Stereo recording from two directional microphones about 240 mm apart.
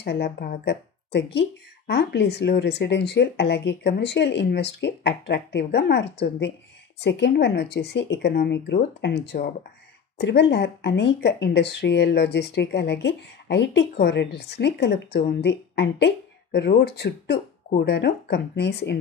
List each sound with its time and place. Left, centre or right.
0.0 s speech: left